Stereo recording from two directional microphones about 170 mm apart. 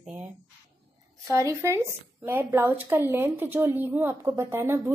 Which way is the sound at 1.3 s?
15° right (ahead or behind).